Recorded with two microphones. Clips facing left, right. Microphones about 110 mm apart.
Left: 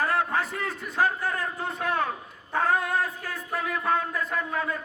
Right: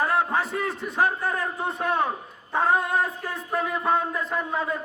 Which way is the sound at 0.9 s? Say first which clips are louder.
Right 1 dB; centre (ahead or behind).